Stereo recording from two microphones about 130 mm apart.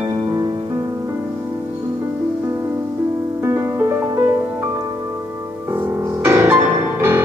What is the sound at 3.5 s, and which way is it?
Music, 20° right (ahead or behind).